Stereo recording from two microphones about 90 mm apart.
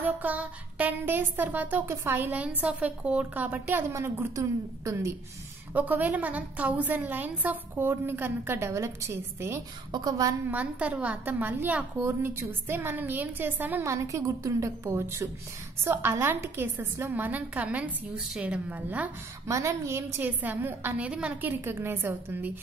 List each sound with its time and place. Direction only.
0.0 s music: 20° right (ahead or behind)
4.4 s a woman's voice: 35° right (ahead or behind)
5.7 s music: 20° right (ahead or behind)
9.9 s a woman's voice: 45° right (ahead or behind)
10.5 s music: 15° right (ahead or behind)
13.8 s a woman's voice: 35° right (ahead or behind)
15.8 s music: 25° right (ahead or behind)
18.3 s a woman's voice: 15° right (ahead or behind)
19.4 s music: 35° right (ahead or behind)